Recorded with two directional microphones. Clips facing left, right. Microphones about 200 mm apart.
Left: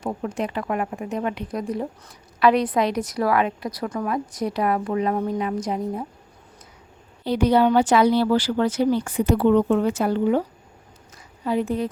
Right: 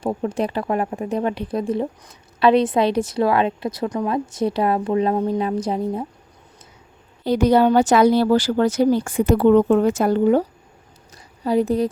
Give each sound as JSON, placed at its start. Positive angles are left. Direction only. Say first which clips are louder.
{"t": 0.0, "sound": "speech", "louder": "right 4 dB", "side_deg": -30}
{"t": 7.3, "sound": "speech", "louder": "right 3 dB", "side_deg": -45}
{"t": 11.1, "sound": "a sound", "louder": "right 4 dB", "side_deg": -35}